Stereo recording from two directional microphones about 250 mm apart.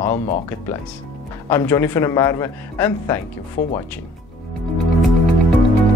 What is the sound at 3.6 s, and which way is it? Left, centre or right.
Speech, left.